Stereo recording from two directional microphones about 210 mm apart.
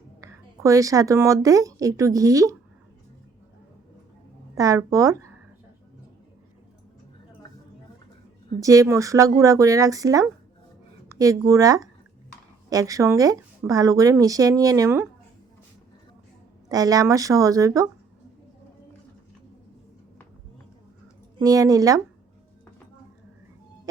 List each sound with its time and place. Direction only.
0.2 s speech: 15° right (ahead or behind)
4.5 s speech: 15° right (ahead or behind)
8.6 s speech: 15° right (ahead or behind)
16.6 s speech: 15° right (ahead or behind)
21.3 s speech: 15° right (ahead or behind)